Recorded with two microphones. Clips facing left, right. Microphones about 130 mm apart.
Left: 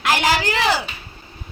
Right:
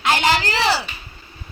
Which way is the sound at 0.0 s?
5° left (ahead or behind).